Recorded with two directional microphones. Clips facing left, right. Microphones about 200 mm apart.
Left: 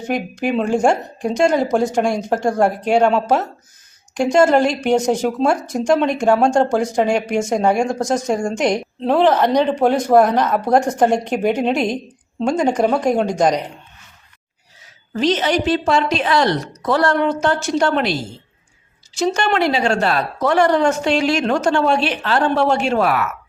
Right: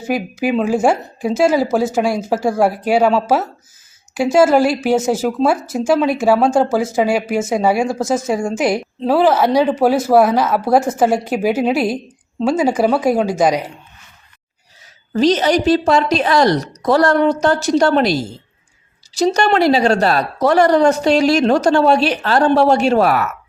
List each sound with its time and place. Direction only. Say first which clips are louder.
0.0 s a woman's voice: right 2 dB; 5° right (ahead or behind)
15.1 s speech: right 4 dB; 40° right (ahead or behind)